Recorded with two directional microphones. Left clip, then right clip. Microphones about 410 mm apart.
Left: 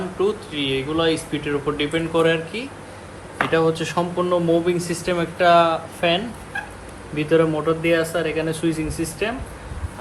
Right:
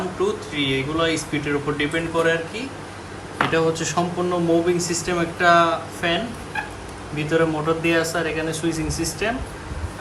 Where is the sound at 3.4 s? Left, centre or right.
Centre.